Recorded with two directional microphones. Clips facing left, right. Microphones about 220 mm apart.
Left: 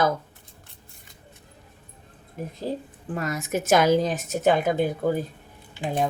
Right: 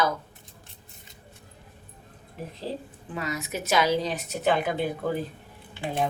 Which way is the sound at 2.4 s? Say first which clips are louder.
Left 4 dB; 45° left (ahead or behind).